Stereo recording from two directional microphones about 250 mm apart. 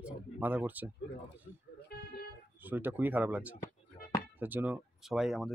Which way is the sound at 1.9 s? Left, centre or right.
Left.